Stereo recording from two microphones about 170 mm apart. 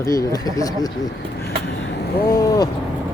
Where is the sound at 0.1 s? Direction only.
20° left (ahead or behind).